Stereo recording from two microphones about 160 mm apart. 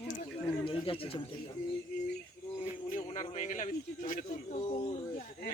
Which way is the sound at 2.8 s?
50° left (ahead or behind).